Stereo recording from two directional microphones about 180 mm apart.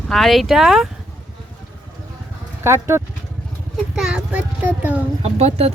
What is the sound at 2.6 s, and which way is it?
Speech, 15° right (ahead or behind).